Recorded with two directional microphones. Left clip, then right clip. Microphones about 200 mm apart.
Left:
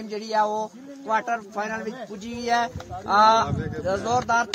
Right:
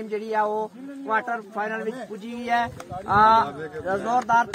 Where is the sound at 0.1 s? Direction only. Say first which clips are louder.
Left 1 dB; 60° left (ahead or behind).